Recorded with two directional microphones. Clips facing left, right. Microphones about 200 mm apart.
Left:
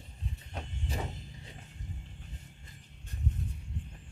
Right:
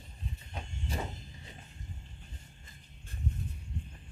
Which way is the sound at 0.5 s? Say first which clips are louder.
Left 2 dB; 70° left (ahead or behind).